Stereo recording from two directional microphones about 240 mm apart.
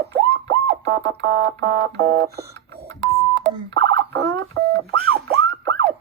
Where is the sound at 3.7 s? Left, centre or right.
Right.